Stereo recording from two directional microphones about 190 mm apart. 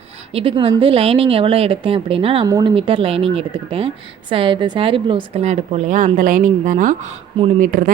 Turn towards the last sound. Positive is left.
turn(degrees=-45)  # may be behind; listen again after turning